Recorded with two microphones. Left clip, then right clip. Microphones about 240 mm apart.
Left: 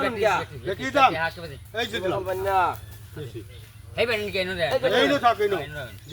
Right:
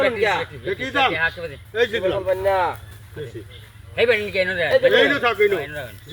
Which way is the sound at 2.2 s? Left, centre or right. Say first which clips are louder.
Right 2 dB; centre.